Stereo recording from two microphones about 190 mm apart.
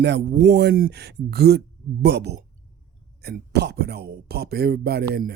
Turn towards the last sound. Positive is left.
turn(degrees=-55)  # may be behind; listen again after turning